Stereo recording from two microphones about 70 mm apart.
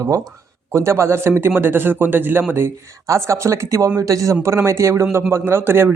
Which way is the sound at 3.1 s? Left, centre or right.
Right.